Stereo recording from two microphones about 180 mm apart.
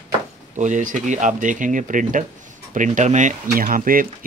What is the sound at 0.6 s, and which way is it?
Speech, 45° right (ahead or behind).